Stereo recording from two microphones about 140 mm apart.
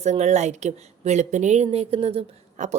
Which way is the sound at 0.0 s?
55° right (ahead or behind).